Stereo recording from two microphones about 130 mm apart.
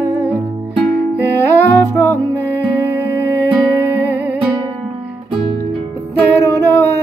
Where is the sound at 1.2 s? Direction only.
20° left (ahead or behind).